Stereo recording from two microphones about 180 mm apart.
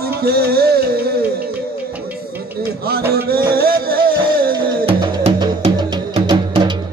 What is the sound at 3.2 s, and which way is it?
Music, 60° right (ahead or behind).